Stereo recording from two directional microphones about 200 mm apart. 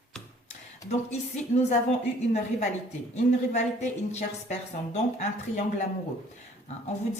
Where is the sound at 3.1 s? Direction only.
35° left (ahead or behind).